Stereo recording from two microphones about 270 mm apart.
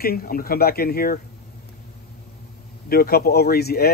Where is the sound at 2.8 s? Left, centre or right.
Left.